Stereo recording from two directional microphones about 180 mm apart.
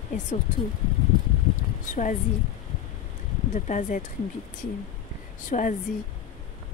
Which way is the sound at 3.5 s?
40° left (ahead or behind).